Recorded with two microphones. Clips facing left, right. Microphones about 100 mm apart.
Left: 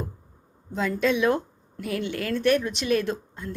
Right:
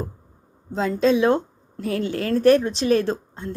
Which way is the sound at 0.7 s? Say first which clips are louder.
Right 5 dB; 30° right (ahead or behind).